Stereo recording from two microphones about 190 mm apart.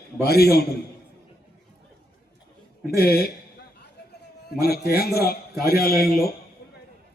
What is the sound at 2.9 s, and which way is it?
Speech, 55° left (ahead or behind).